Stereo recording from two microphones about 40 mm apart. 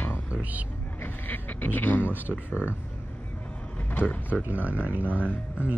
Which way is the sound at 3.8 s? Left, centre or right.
Left.